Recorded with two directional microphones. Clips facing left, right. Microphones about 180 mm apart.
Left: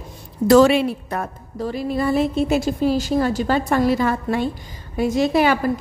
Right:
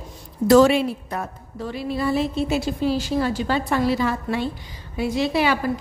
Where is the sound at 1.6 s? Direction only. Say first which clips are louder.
Left 3 dB; 40° left (ahead or behind).